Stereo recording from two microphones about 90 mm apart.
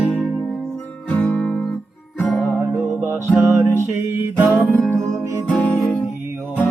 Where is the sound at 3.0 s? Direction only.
25° right (ahead or behind).